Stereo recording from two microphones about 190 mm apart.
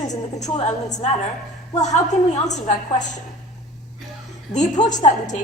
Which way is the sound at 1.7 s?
35° left (ahead or behind).